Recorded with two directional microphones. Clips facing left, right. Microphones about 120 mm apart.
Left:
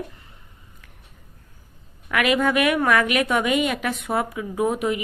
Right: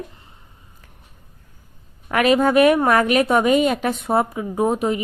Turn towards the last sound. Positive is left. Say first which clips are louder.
# right 3 dB
turn(degrees=-30)  # may be behind; listen again after turning